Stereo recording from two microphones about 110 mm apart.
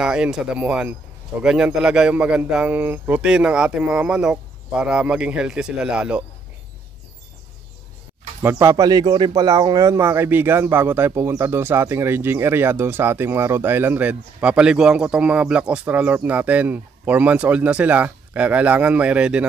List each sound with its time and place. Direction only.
0.0 s speech: 5° right (ahead or behind)
8.4 s speech: 25° right (ahead or behind)